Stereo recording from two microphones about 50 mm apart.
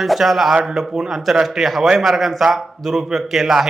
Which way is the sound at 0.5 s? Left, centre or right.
Centre.